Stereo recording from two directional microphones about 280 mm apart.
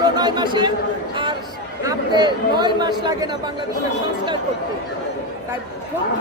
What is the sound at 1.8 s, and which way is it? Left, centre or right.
A man's voice, centre.